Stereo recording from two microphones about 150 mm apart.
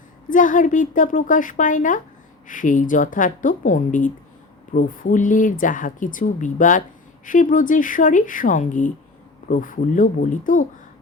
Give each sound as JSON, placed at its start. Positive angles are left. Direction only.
{"t": 0.3, "sound": "a woman's voice", "side_deg": 60}